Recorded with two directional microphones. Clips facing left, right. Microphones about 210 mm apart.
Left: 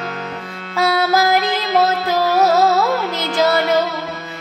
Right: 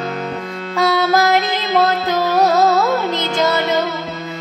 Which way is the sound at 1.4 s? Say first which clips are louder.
Even; 20° right (ahead or behind).